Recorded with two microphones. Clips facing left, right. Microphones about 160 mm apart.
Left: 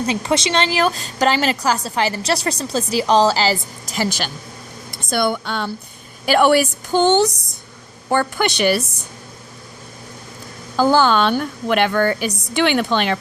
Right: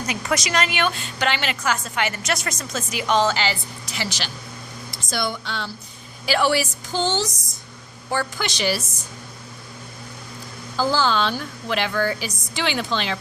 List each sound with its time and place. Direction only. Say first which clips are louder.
0.0 s a woman's voice: left 6 dB; 30° left (ahead or behind); by 4.3 s 45° left (ahead or behind)
4.9 s a woman's voice: left 7 dB; 60° left (ahead or behind)
10.8 s a woman's voice: left 6 dB; 55° left (ahead or behind)